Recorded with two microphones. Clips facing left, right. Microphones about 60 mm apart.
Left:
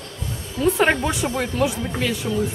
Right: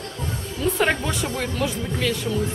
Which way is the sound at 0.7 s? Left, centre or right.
Centre.